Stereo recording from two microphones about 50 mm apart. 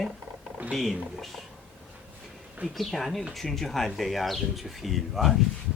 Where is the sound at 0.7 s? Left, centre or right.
Centre.